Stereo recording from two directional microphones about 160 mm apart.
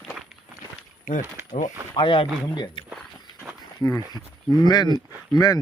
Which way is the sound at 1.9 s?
35° left (ahead or behind).